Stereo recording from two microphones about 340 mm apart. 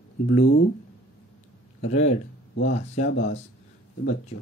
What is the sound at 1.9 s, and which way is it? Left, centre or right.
Speech, centre.